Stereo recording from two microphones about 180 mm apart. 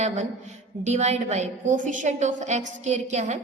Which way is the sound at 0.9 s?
40° right (ahead or behind).